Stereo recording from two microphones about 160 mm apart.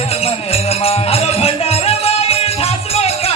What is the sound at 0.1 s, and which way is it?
Music, 40° left (ahead or behind).